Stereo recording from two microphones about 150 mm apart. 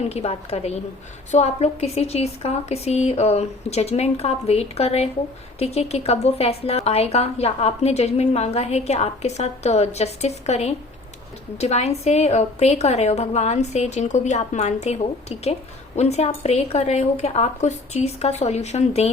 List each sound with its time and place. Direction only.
0.0 s a woman's voice: 45° left (ahead or behind)